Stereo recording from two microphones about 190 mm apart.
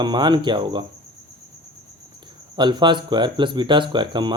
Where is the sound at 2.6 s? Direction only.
25° right (ahead or behind).